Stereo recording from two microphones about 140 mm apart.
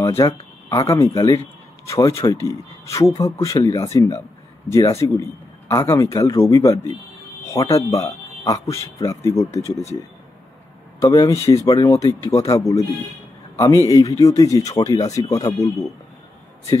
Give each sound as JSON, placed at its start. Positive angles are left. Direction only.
{"t": 0.2, "sound": "a man's voice", "side_deg": 25}
{"t": 11.0, "sound": "a man's voice", "side_deg": 25}
{"t": 13.8, "sound": "a man's voice", "side_deg": 25}